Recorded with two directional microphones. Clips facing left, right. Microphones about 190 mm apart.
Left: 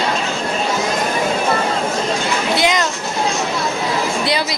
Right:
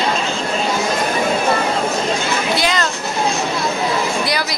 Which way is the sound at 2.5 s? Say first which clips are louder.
Left 3 dB; 20° left (ahead or behind).